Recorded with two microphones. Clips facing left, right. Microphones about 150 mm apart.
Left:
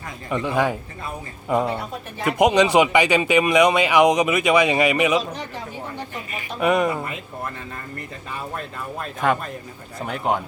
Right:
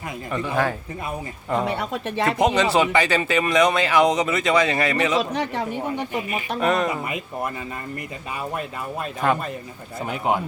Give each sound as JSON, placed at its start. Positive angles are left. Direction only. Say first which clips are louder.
{"t": 0.3, "sound": "speech", "louder": "left 2 dB", "side_deg": 15}
{"t": 1.6, "sound": "speech", "louder": "right 2 dB", "side_deg": -80}
{"t": 2.4, "sound": "speech", "louder": "left 4 dB", "side_deg": 15}
{"t": 5.3, "sound": "speech", "louder": "right 7 dB", "side_deg": -70}
{"t": 6.6, "sound": "speech", "louder": "left 3 dB", "side_deg": 10}
{"t": 7.0, "sound": "speech", "louder": "right 3 dB", "side_deg": -10}
{"t": 8.5, "sound": "speech", "louder": "right 2 dB", "side_deg": -5}